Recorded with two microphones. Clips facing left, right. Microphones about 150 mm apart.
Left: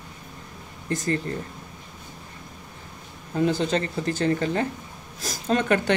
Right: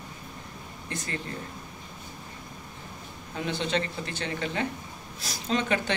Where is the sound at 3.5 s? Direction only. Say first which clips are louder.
Even; 40° left (ahead or behind).